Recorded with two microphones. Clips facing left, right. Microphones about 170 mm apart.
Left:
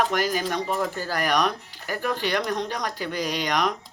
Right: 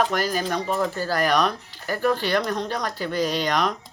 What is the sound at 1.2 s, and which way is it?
Speech, 15° left (ahead or behind).